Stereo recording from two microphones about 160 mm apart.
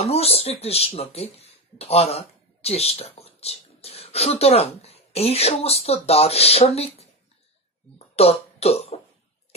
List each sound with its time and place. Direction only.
0.0 s speech: 40° left (ahead or behind)
8.2 s speech: 40° left (ahead or behind)